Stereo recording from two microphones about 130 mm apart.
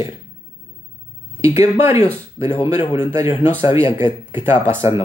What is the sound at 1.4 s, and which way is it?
Speech, 20° right (ahead or behind).